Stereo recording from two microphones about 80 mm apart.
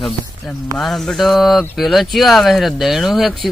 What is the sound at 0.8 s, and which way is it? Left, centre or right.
Speech, centre.